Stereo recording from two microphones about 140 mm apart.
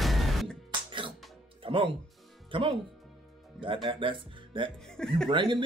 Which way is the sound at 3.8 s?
35° right (ahead or behind).